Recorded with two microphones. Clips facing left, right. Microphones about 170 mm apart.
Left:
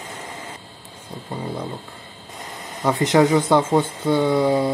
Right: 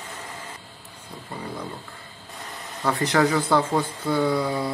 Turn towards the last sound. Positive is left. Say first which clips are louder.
# left 5 dB
turn(degrees=20)  # may be behind; listen again after turning